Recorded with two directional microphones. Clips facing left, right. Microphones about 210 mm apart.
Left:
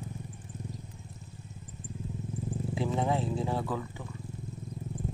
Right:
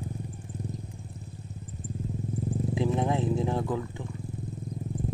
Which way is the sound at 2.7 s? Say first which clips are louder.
Right 2 dB; 15° right (ahead or behind).